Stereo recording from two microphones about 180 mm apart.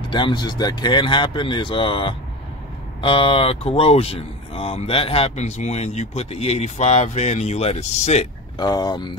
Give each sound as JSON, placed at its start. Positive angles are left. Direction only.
{"t": 0.1, "sound": "speech", "side_deg": 25}
{"t": 8.5, "sound": "speech", "side_deg": 20}